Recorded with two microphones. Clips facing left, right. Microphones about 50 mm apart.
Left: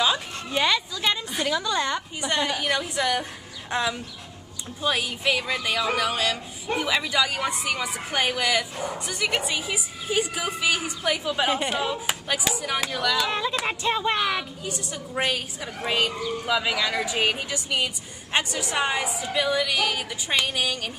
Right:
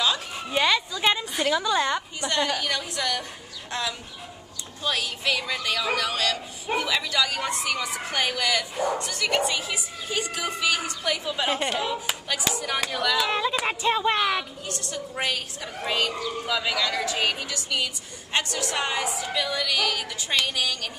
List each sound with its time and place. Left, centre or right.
0.5 s a woman's voice: centre
2.2 s a woman's voice: centre
14.7 s a woman's voice: centre